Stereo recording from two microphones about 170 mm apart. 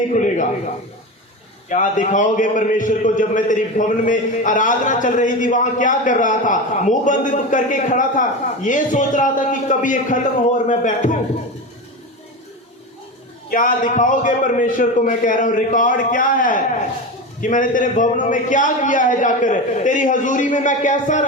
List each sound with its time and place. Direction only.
0.1 s a sound: 45° left (ahead or behind)
1.7 s a man's voice: 45° left (ahead or behind)
13.5 s a man's voice: 50° left (ahead or behind)